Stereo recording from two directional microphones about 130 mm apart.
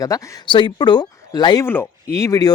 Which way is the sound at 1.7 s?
20° left (ahead or behind).